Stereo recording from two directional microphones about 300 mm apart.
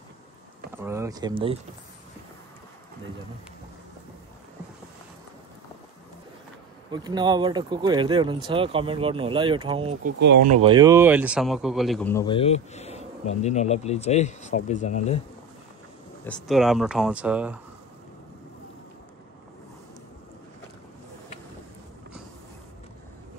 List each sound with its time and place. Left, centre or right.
0.7 s speech: centre
6.9 s speech: centre
10.2 s speech: right
10.5 s speech: centre; by 15.1 s left
16.3 s speech: centre